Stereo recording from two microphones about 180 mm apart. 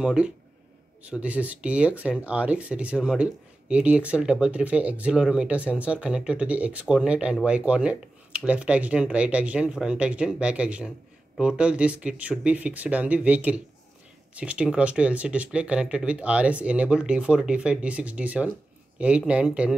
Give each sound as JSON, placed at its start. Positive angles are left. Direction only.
{"t": 0.0, "sound": "speech", "side_deg": -5}